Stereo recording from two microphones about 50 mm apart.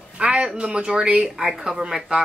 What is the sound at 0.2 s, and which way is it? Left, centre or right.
Speech, right.